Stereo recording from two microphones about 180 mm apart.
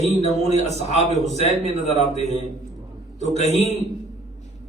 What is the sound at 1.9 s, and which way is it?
A man's voice, 35° left (ahead or behind).